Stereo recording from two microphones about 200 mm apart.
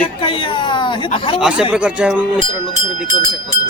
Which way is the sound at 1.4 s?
5° right (ahead or behind).